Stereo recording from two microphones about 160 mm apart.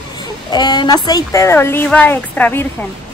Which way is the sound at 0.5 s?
25° left (ahead or behind).